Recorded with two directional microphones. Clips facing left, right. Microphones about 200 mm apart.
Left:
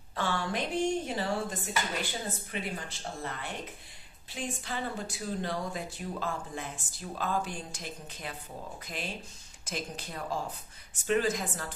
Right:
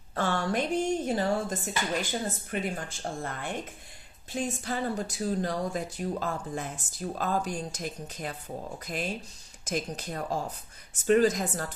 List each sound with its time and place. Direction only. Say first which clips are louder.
0.1 s a woman's voice: right 4 dB; 45° right (ahead or behind)